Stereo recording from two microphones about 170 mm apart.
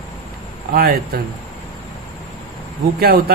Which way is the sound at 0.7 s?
65° right (ahead or behind).